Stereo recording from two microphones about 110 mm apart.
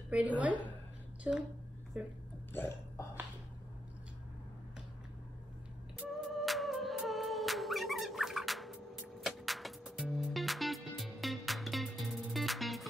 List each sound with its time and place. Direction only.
0.1 s a woman's voice: 15° right (ahead or behind)
2.5 s speech: 20° left (ahead or behind)
5.9 s music: centre (ahead or behind)